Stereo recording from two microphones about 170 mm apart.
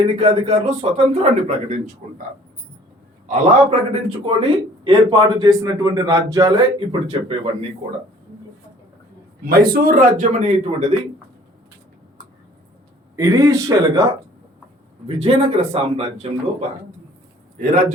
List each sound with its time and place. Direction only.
0.2 s a man's voice: 35° right (ahead or behind)
3.2 s a man's voice: 45° right (ahead or behind); by 6.7 s 20° right (ahead or behind)
6.7 s a man's voice: 35° right (ahead or behind)
9.4 s a man's voice: 65° right (ahead or behind); by 10.9 s 40° right (ahead or behind)
13.1 s a man's voice: 20° right (ahead or behind)
15.0 s a man's voice: 35° right (ahead or behind)